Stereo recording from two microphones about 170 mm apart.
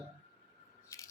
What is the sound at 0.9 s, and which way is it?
Scissors, 20° left (ahead or behind).